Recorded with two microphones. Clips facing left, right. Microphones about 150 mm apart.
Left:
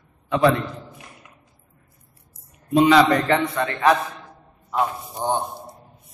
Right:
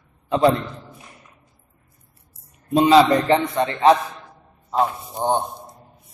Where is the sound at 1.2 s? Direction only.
80° left.